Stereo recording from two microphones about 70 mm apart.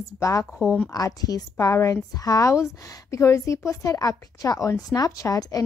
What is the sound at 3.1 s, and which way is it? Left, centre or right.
A woman's voice, left.